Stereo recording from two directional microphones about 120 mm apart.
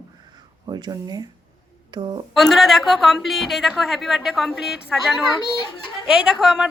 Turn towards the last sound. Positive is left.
turn(degrees=-5)  # may be behind; listen again after turning